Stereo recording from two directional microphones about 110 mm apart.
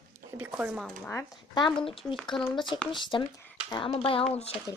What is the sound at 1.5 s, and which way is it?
Speech, 45° left (ahead or behind).